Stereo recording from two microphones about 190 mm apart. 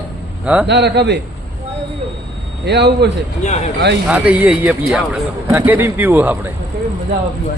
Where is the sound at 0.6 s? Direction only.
65° right (ahead or behind).